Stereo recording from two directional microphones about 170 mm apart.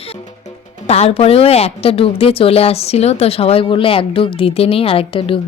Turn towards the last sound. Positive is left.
turn(degrees=30)  # may be behind; listen again after turning